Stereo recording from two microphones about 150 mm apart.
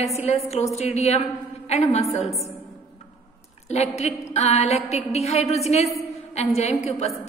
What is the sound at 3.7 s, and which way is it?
A woman's voice, 45° left (ahead or behind).